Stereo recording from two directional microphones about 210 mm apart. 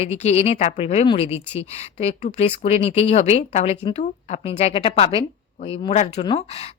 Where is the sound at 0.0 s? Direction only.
30° left (ahead or behind).